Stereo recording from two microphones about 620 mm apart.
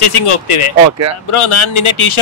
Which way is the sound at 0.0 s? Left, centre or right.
Left.